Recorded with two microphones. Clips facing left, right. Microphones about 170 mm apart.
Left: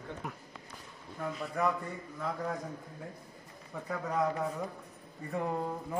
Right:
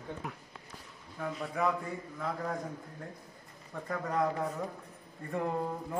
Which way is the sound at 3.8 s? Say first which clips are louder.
Even; centre (ahead or behind).